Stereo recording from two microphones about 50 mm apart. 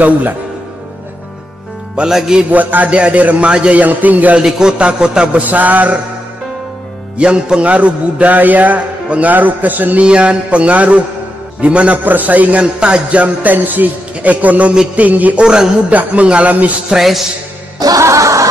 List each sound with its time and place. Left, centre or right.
2.0 s a man's voice: centre
2.5 s a man's voice: right
3.8 s speech: right
4.4 s a man's voice: centre
5.4 s speech: right
7.2 s a man's voice: centre; by 10.0 s right
10.0 s a man's voice: right
12.0 s speech: right
15.4 s a man's voice: centre
15.9 s speech: right
16.9 s a man's voice: centre
18.0 s snicker: right